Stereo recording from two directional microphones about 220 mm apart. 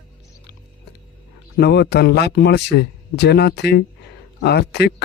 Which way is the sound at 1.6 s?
50° left (ahead or behind).